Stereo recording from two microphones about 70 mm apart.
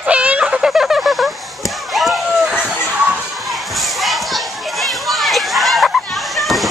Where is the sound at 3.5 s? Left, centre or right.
Centre.